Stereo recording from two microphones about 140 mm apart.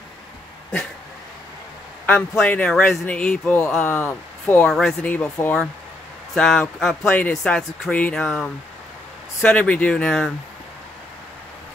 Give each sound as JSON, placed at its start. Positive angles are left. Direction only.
{"t": 2.0, "sound": "speech", "side_deg": 10}
{"t": 4.6, "sound": "a man's voice", "side_deg": 5}
{"t": 7.1, "sound": "speech", "side_deg": 10}